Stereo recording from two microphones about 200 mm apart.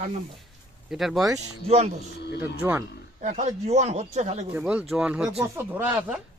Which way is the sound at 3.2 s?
35° right (ahead or behind).